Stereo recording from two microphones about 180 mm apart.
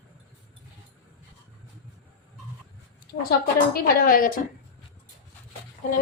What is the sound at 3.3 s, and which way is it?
A woman's voice, 55° left (ahead or behind).